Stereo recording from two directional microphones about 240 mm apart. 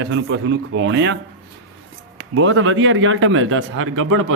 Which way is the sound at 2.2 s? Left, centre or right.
Right.